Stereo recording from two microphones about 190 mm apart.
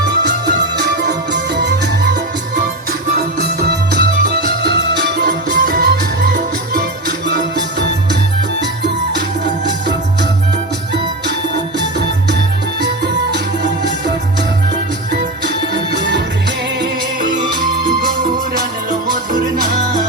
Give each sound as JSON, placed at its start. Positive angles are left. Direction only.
{"t": 0.0, "sound": "music", "side_deg": -65}
{"t": 3.2, "sound": "music", "side_deg": -60}
{"t": 11.8, "sound": "music", "side_deg": -65}
{"t": 15.7, "sound": "music", "side_deg": -65}
{"t": 18.9, "sound": "music", "side_deg": -45}